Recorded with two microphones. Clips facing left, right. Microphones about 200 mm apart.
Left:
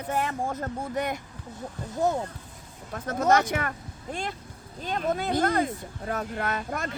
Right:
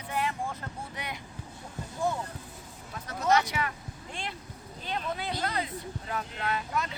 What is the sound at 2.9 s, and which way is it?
Speech, 50° left (ahead or behind).